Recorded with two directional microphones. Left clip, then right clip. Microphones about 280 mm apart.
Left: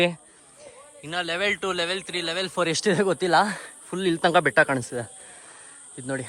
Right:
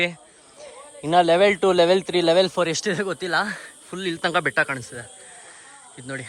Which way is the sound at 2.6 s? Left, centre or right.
Centre.